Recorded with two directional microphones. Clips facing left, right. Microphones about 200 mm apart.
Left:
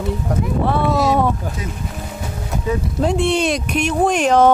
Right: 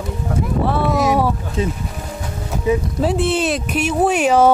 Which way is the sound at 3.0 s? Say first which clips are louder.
Even; 5° right (ahead or behind).